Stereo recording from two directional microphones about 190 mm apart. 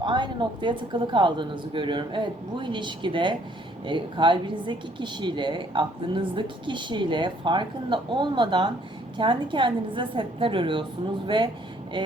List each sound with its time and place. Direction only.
0.0 s speech: 25° right (ahead or behind)